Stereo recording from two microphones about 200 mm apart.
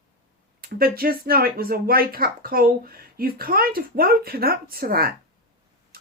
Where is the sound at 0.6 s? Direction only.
50° right (ahead or behind).